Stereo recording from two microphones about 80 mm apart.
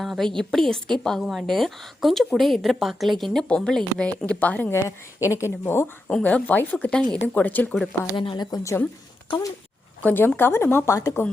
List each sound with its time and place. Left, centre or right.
0.0 s a woman's voice: centre; by 4.7 s left
4.7 s a woman's voice: left
6.1 s speech: centre
8.1 s speech: left
8.4 s a woman's voice: left
10.0 s speech: left